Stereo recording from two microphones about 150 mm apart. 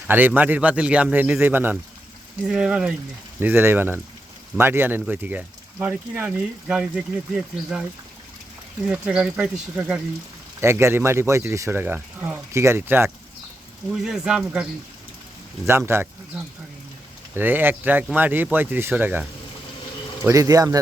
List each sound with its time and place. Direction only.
0.1 s speech: 10° right (ahead or behind)
8.9 s speech: 10° right (ahead or behind)
10.6 s speech: 15° right (ahead or behind)
13.9 s speech: 5° right (ahead or behind)
15.9 s speech: 15° right (ahead or behind)
20.2 s speech: 25° right (ahead or behind)